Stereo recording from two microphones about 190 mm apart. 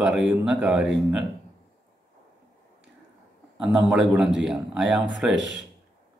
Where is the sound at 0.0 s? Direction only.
5° right (ahead or behind).